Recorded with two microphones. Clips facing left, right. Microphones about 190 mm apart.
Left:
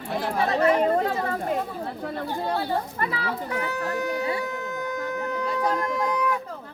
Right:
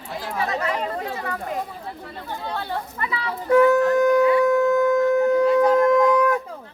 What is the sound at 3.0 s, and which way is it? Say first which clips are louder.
Speech: even; 50° left (ahead or behind).